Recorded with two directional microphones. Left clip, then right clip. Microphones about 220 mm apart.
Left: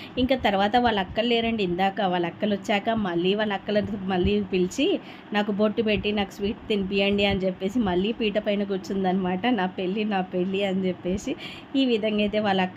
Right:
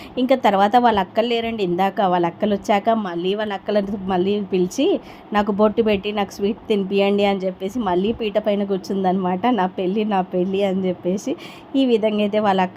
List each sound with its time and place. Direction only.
0.2 s a woman's voice: 20° right (ahead or behind)